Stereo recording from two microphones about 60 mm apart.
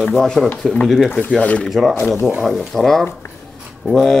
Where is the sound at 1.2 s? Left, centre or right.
Left.